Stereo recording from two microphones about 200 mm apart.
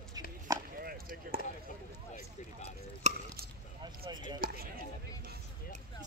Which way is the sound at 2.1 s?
35° left (ahead or behind).